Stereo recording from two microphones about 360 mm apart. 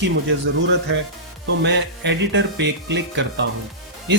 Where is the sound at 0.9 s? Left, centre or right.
Right.